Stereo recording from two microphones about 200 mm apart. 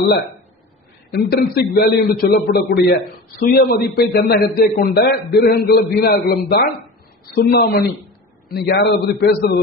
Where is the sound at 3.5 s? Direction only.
50° left (ahead or behind).